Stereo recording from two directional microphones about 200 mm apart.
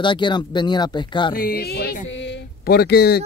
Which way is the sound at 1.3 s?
50° left (ahead or behind).